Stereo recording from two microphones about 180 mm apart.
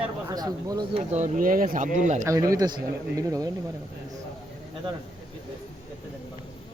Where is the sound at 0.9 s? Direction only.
40° right (ahead or behind).